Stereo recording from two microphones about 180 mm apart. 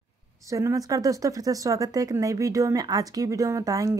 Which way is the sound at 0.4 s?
15° right (ahead or behind).